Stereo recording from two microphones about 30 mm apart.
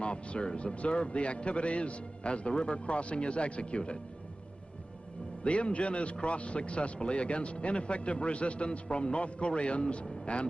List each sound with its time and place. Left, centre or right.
0.0 s a man's voice: left
5.4 s a man's voice: left